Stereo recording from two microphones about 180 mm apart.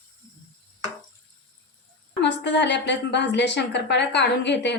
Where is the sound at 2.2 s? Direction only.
75° left (ahead or behind).